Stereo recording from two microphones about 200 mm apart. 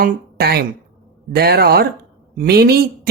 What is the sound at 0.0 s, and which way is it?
A woman's voice, 50° right (ahead or behind).